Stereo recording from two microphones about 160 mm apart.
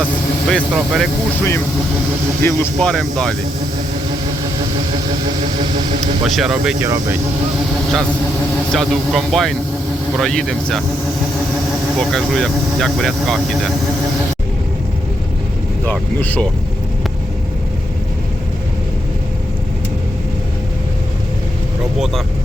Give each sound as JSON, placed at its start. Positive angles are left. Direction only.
{"t": 0.4, "sound": "speech", "side_deg": 0}
{"t": 1.4, "sound": "speech", "side_deg": 15}
{"t": 2.9, "sound": "speech", "side_deg": 5}
{"t": 6.2, "sound": "speech", "side_deg": 0}
{"t": 6.8, "sound": "speech", "side_deg": -20}
{"t": 8.7, "sound": "speech", "side_deg": 0}
{"t": 11.9, "sound": "speech", "side_deg": 0}
{"t": 15.9, "sound": "speech", "side_deg": 10}